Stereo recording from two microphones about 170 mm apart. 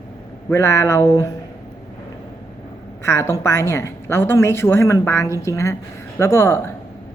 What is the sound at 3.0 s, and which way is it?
Speech, 15° left (ahead or behind).